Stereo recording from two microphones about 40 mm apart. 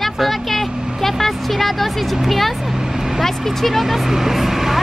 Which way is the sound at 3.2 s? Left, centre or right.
Centre.